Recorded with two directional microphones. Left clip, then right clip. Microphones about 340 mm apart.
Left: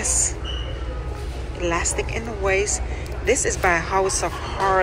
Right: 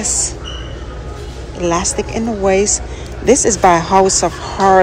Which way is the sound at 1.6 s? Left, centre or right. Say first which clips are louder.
Right 7 dB; centre.